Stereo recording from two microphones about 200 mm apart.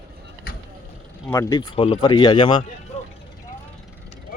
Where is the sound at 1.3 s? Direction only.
15° left (ahead or behind).